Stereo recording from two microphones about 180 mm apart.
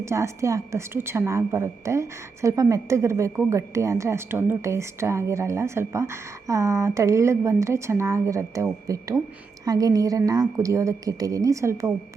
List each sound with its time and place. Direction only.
0.0 s a woman's voice: 15° right (ahead or behind)